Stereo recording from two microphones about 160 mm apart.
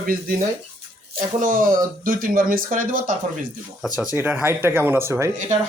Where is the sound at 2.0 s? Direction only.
60° right (ahead or behind).